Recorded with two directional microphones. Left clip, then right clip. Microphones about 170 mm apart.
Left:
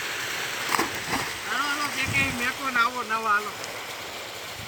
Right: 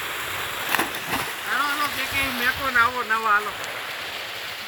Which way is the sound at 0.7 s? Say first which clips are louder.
Right 2 dB; 5° right (ahead or behind).